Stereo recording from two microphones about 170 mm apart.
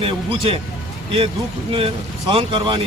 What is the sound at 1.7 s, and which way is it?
Speech, 35° right (ahead or behind).